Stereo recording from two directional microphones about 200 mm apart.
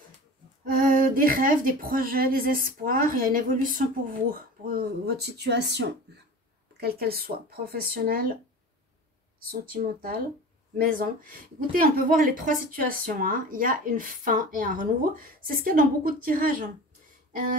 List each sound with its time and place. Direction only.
0.7 s speech: 45° right (ahead or behind)
9.5 s speech: 45° right (ahead or behind)